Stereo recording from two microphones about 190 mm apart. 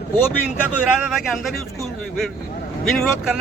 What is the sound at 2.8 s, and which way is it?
Speech, centre (ahead or behind).